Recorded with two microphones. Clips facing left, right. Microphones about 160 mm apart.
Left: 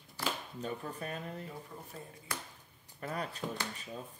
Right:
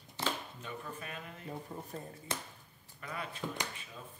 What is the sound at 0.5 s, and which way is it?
Speech, 40° left (ahead or behind).